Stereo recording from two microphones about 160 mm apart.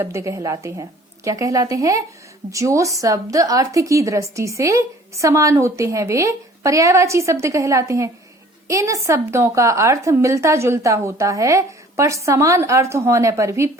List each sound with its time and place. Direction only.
0.0 s a woman's voice: 20° right (ahead or behind)